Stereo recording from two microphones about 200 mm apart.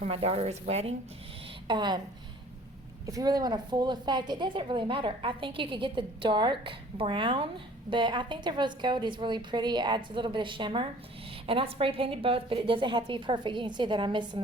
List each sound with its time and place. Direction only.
0.0 s a woman's voice: 30° right (ahead or behind)
3.1 s a woman's voice: 20° right (ahead or behind)